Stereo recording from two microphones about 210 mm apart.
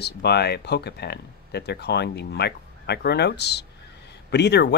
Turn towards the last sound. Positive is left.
turn(degrees=55)  # may be behind; listen again after turning